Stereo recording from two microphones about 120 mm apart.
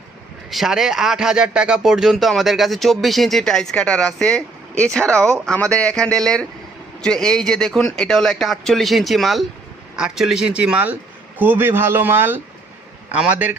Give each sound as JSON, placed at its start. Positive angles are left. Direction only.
{"t": 0.5, "sound": "speech", "side_deg": -5}